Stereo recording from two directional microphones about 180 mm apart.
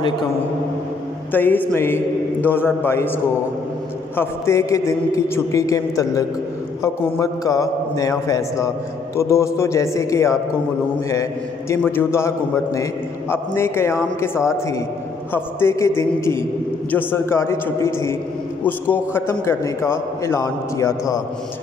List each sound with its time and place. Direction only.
1.3 s a man's voice: 10° left (ahead or behind)
4.2 s a man's voice: 15° left (ahead or behind)
11.7 s a man's voice: 10° left (ahead or behind)